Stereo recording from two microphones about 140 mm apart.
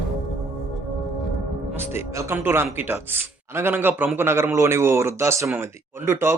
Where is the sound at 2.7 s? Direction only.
15° right (ahead or behind).